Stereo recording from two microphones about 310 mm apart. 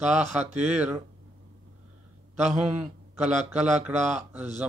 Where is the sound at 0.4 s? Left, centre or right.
Right.